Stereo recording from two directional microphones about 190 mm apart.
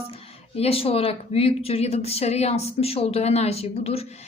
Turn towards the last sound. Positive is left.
turn(degrees=30)  # may be behind; listen again after turning